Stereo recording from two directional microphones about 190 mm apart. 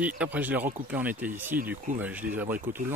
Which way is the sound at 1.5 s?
50° right (ahead or behind).